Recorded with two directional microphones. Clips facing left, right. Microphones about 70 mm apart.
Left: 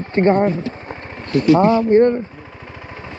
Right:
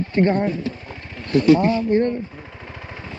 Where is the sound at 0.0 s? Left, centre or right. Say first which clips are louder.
Left 4 dB; left.